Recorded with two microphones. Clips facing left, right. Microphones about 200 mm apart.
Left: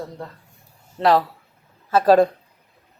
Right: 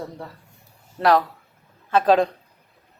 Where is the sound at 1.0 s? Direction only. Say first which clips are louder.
Left 1 dB; centre (ahead or behind).